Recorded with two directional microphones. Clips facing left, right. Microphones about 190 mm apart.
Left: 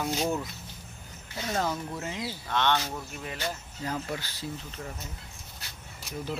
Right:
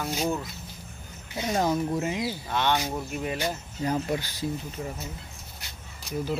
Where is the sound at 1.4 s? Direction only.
15° right (ahead or behind).